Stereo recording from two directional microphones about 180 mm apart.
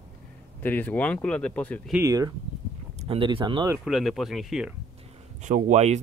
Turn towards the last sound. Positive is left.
turn(degrees=-40)  # may be behind; listen again after turning